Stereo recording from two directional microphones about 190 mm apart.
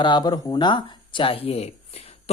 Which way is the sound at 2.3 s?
35° left (ahead or behind).